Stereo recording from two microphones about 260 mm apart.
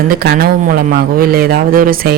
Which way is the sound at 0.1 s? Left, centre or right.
Right.